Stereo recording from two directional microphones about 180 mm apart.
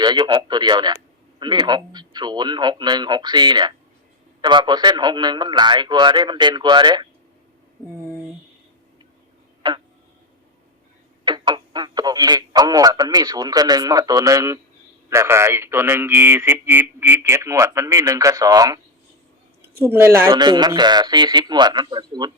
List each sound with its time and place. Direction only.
0.0 s a man's voice: 25° right (ahead or behind)
9.6 s a man's voice: 25° right (ahead or behind)
11.3 s a man's voice: 25° right (ahead or behind)
19.8 s a man's voice: 15° right (ahead or behind)